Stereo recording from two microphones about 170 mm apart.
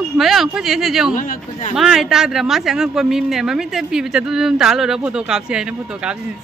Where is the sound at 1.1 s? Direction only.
50° left (ahead or behind).